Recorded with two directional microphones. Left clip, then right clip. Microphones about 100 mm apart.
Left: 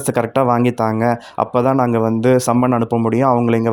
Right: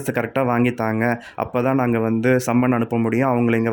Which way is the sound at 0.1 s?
25° left (ahead or behind).